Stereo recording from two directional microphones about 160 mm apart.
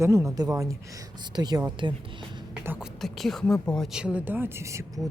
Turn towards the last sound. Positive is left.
turn(degrees=-15)  # may be behind; listen again after turning